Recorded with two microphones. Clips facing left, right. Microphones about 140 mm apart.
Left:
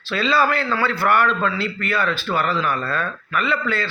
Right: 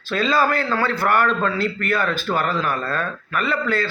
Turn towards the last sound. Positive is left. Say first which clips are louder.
# right 1 dB
turn(degrees=-45)  # may be behind; listen again after turning